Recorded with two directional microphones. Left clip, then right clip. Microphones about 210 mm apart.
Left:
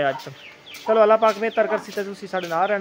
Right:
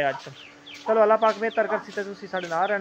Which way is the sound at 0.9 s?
10° left (ahead or behind).